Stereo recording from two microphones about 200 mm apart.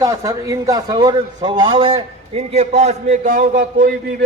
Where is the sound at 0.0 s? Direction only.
15° right (ahead or behind).